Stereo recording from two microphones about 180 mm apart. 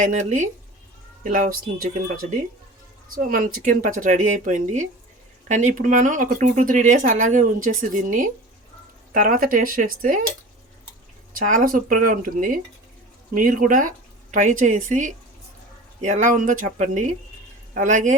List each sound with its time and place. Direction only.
0.0 s speech: 45° right (ahead or behind)
11.3 s speech: 50° right (ahead or behind)